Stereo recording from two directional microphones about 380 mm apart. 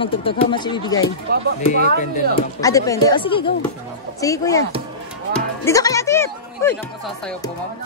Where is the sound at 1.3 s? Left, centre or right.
Right.